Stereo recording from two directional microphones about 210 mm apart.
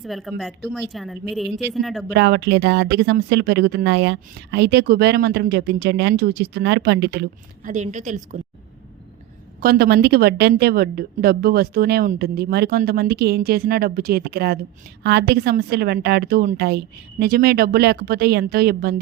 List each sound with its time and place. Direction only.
0.0 s a woman's voice: centre (ahead or behind)
2.1 s speech: 50° right (ahead or behind)
7.7 s a woman's voice: 35° right (ahead or behind)
9.6 s speech: 45° right (ahead or behind)